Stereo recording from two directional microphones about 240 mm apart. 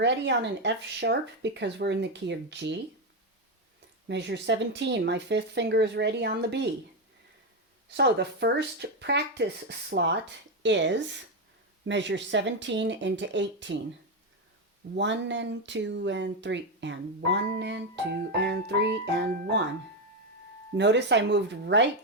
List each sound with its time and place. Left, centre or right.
0.0 s speech: right
4.1 s speech: right
7.9 s speech: right
14.9 s speech: right
20.7 s speech: right